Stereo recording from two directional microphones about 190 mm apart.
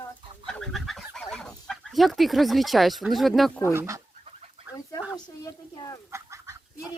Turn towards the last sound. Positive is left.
turn(degrees=-15)  # may be behind; listen again after turning